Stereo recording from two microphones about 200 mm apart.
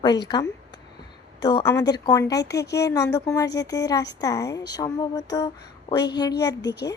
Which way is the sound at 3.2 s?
20° left (ahead or behind).